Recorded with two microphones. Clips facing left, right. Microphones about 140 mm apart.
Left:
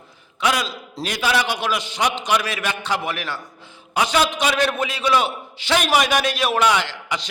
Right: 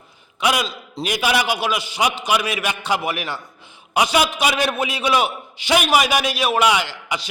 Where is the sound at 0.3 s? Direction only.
15° right (ahead or behind).